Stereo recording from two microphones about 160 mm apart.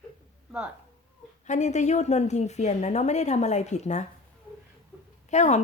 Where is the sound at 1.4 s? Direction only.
50° left (ahead or behind).